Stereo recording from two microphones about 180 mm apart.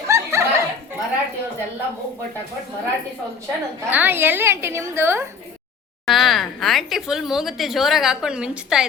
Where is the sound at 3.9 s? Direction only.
10° right (ahead or behind).